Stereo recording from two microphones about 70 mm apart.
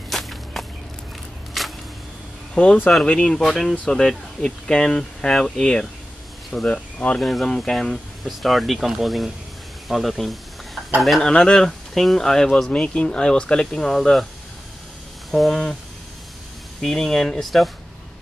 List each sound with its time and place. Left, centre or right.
0.1 s walk: centre
1.6 s single-lens reflex camera: centre
2.5 s speech: centre
7.2 s speech: centre
9.8 s snake: centre
11.0 s speech: centre
15.3 s speech: centre
16.8 s speech: centre